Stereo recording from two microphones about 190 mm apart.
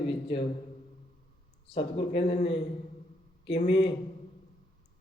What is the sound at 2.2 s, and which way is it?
A man's voice, 30° left (ahead or behind).